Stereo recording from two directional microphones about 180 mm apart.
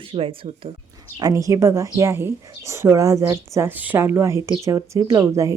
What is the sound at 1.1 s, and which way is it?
A woman's voice, 20° right (ahead or behind).